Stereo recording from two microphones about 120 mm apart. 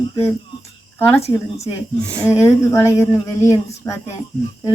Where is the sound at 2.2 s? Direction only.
25° left (ahead or behind).